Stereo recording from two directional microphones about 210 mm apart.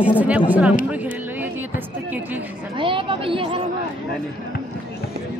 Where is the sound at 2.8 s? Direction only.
25° right (ahead or behind).